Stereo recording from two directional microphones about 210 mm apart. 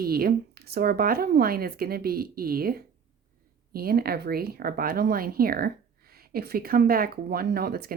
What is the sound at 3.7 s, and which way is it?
Speech, 45° right (ahead or behind).